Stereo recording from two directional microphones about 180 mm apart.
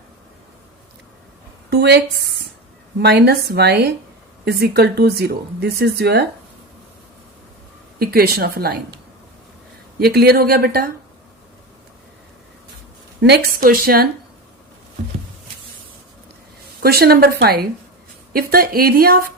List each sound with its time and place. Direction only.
1.7 s a woman's voice: 65° right (ahead or behind)
3.0 s speech: 70° right (ahead or behind)
7.9 s speech: 60° right (ahead or behind)
10.0 s speech: 60° right (ahead or behind)
13.2 s speech: 60° right (ahead or behind)
16.8 s speech: 60° right (ahead or behind)